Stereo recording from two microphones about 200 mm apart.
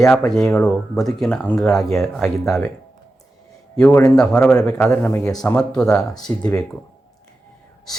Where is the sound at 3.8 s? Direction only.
10° left (ahead or behind).